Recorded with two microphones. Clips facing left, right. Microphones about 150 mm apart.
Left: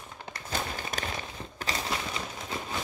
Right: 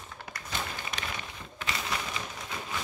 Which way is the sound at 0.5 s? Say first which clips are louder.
Left 3 dB; 40° left (ahead or behind).